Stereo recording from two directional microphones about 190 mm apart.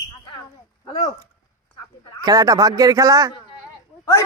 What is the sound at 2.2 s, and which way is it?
A man's voice, 20° right (ahead or behind).